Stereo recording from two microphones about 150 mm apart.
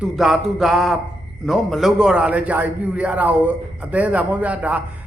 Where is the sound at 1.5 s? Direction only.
Centre (ahead or behind).